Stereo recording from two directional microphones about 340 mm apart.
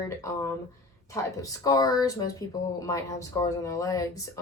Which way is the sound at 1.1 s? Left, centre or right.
Centre.